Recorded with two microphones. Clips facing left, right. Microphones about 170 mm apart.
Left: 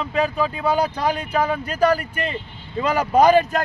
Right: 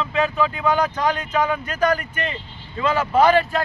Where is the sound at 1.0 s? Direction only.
10° left (ahead or behind).